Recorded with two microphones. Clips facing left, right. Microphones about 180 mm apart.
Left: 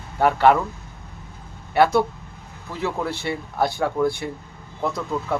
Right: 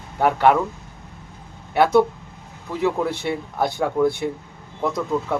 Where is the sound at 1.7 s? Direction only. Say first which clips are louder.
Right 2 dB; 20° right (ahead or behind).